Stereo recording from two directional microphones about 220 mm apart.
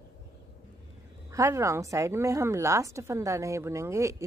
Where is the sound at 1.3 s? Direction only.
15° right (ahead or behind).